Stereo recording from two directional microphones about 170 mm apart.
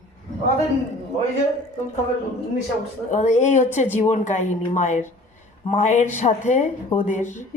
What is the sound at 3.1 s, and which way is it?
Speech, 45° left (ahead or behind).